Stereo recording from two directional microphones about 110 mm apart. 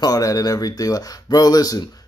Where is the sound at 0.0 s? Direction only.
35° left (ahead or behind).